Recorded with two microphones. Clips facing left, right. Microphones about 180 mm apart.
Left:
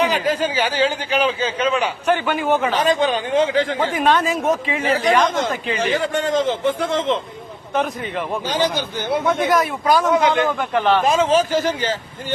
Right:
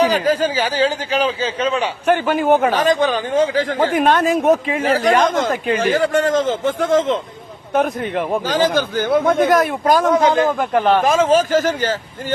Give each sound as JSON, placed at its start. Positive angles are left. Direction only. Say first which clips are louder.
{"t": 0.0, "sound": "speech", "louder": "right 3 dB", "side_deg": -40}
{"t": 2.0, "sound": "a man's voice", "louder": "right 5 dB", "side_deg": -50}
{"t": 3.9, "sound": "a man's voice", "louder": "right 3 dB", "side_deg": -55}